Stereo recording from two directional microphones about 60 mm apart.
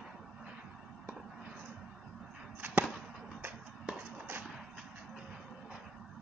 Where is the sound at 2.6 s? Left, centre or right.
Right.